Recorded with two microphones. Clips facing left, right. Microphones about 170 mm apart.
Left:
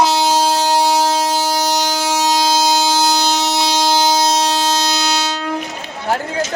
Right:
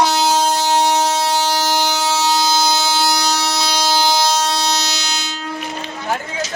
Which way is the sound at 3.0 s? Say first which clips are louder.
Left 2 dB; 20° left (ahead or behind).